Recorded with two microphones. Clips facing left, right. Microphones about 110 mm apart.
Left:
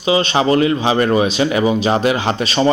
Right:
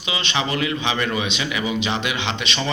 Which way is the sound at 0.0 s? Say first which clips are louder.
Left 10 dB; 35° left (ahead or behind).